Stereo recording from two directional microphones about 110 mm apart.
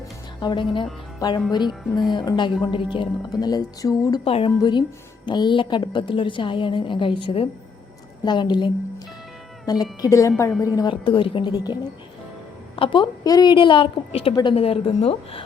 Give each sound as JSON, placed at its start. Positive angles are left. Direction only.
{"t": 0.3, "sound": "a woman's voice", "side_deg": 45}
{"t": 4.2, "sound": "a woman's voice", "side_deg": 55}
{"t": 5.2, "sound": "a woman's voice", "side_deg": 45}
{"t": 10.8, "sound": "a woman's voice", "side_deg": 45}